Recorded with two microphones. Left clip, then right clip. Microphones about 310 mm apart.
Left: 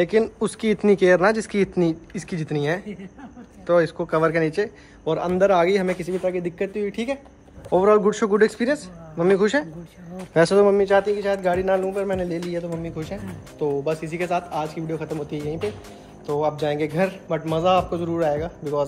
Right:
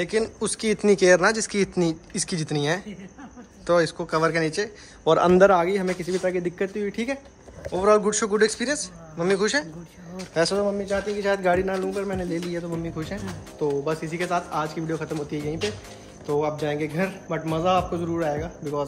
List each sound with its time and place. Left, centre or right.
0.0 s a man's voice: centre
5.1 s a man's voice: centre
5.5 s a man's voice: centre
10.3 s speech: left
10.8 s a man's voice: centre